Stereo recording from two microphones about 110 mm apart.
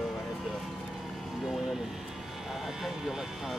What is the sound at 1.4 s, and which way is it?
Speech, centre (ahead or behind).